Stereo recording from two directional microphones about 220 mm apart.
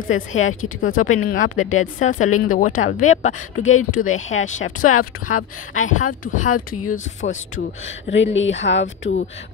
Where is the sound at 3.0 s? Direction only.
35° left (ahead or behind).